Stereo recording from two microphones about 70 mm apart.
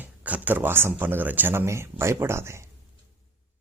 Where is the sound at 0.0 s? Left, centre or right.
Right.